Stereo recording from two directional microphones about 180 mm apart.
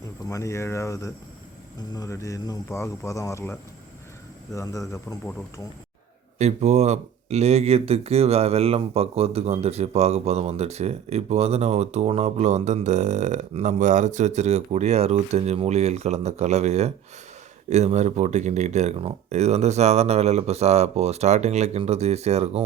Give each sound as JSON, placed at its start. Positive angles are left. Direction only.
{"t": 0.3, "sound": "speech", "side_deg": 15}
{"t": 6.4, "sound": "speech", "side_deg": -40}